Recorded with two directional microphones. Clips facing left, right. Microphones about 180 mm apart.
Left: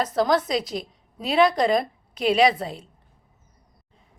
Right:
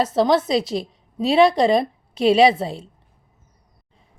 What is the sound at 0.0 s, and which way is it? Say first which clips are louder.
A woman's voice: right 4 dB; 30° right (ahead or behind).